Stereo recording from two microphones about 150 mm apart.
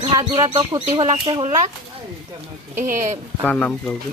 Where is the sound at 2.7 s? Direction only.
65° right (ahead or behind).